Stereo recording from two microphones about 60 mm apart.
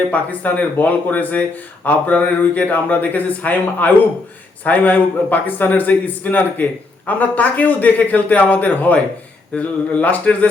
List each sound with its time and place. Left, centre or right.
0.1 s speech: left